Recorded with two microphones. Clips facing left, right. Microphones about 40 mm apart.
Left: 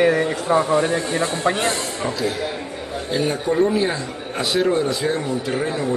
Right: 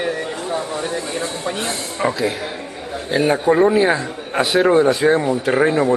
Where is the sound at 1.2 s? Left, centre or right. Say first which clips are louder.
Left 3 dB; left.